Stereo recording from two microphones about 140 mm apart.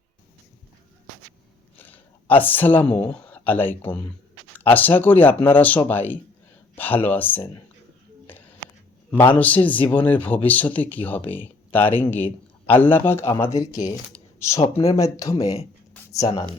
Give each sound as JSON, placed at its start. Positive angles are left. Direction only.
{"t": 1.8, "sound": "speech", "side_deg": 10}
{"t": 9.1, "sound": "a man's voice", "side_deg": 35}
{"t": 9.4, "sound": "speech", "side_deg": 10}